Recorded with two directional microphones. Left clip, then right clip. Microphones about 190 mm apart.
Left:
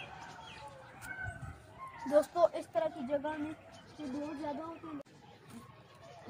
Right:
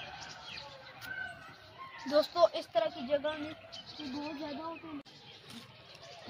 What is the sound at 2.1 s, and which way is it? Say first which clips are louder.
Speech: right 1 dB; 15° left (ahead or behind).